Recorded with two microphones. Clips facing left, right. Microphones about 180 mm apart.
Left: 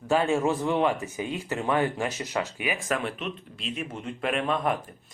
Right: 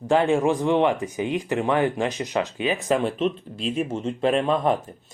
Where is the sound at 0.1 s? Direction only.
20° right (ahead or behind).